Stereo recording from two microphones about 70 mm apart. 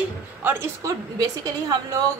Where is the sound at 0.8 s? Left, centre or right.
Right.